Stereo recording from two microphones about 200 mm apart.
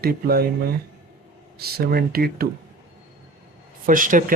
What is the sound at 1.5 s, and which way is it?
Speech, 50° right (ahead or behind).